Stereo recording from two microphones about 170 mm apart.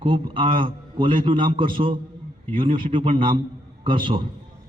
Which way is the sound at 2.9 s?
30° right (ahead or behind).